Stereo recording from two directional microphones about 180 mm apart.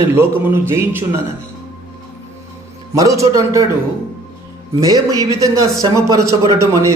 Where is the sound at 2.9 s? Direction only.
15° right (ahead or behind).